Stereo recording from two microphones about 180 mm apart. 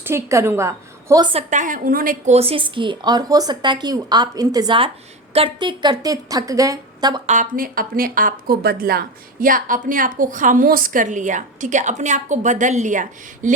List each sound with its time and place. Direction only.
0.0 s a woman's voice: 15° right (ahead or behind)
1.3 s a woman's voice: 40° right (ahead or behind); by 7.2 s 20° right (ahead or behind)
7.3 s speech: 50° right (ahead or behind)